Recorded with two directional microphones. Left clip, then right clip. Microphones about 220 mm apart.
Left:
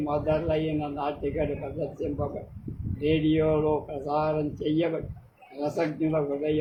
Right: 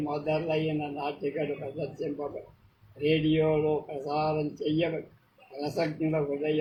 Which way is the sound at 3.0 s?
15° left (ahead or behind).